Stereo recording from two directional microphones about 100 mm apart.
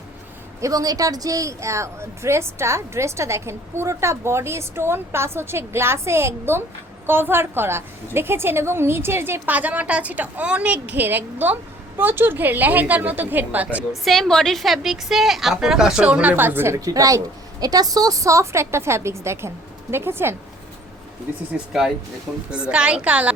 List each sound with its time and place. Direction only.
0.6 s a woman's voice: 35° right (ahead or behind); by 13.8 s 15° right (ahead or behind)
14.0 s a woman's voice: centre (ahead or behind); by 20.3 s 25° right (ahead or behind)
21.7 s a woman's voice: 5° right (ahead or behind)